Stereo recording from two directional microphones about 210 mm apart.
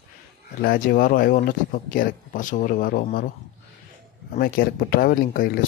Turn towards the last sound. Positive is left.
turn(degrees=45)  # may be behind; listen again after turning